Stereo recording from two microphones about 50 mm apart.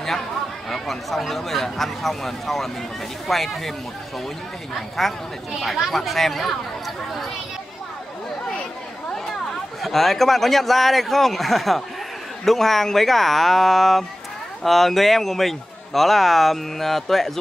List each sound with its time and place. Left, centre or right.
0.7 s a man's voice: centre
4.7 s a man's voice: centre
9.1 s a man's voice: centre